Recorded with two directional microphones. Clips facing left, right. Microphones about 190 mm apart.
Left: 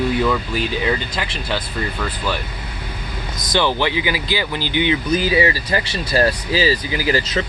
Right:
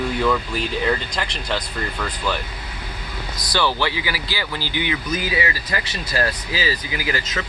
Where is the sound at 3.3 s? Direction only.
20° left (ahead or behind).